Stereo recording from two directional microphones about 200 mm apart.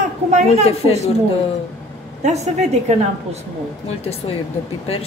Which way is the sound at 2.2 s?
35° right (ahead or behind).